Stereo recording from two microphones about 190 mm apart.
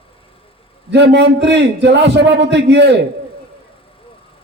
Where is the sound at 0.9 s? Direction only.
65° right (ahead or behind).